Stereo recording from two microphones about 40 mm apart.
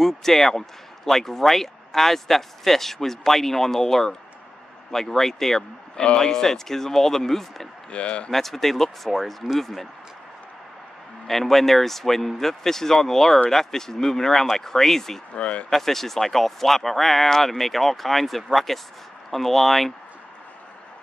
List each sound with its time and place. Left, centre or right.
0.0 s speech: centre
5.6 s speech: left
7.9 s speech: left
8.3 s speech: centre
11.2 s speech: centre
15.3 s speech: left
15.7 s speech: centre